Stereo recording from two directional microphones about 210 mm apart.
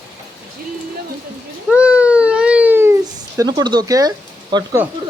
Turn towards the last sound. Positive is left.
turn(degrees=-15)  # may be behind; listen again after turning